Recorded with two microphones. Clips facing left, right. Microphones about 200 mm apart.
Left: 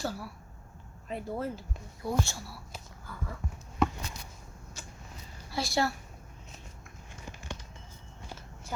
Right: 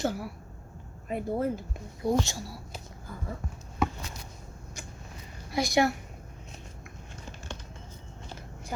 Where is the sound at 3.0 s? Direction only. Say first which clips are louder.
Right 3 dB; 25° right (ahead or behind).